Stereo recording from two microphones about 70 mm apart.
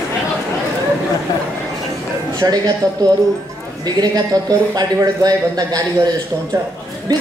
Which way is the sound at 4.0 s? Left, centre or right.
Right.